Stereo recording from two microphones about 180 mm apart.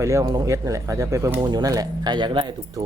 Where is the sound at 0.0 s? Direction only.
15° right (ahead or behind).